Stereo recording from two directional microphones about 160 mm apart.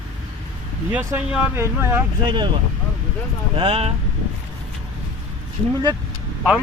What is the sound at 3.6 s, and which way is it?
Speech, 35° right (ahead or behind).